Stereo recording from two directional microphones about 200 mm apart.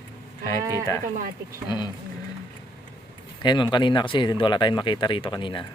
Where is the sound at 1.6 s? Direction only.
20° left (ahead or behind).